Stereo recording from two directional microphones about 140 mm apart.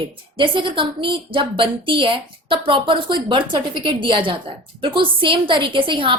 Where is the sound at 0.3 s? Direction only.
35° right (ahead or behind).